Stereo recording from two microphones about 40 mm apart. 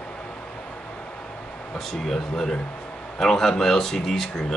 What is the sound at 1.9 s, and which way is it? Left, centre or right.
Speech, centre.